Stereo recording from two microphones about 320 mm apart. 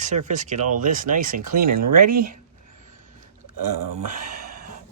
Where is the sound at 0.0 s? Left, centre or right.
Right.